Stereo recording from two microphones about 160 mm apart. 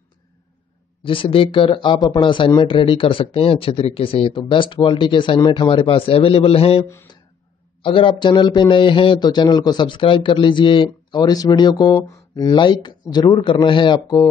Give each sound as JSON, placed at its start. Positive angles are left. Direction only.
{"t": 1.0, "sound": "speech", "side_deg": 35}